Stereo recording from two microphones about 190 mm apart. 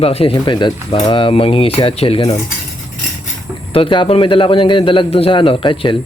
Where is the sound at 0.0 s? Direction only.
30° left (ahead or behind).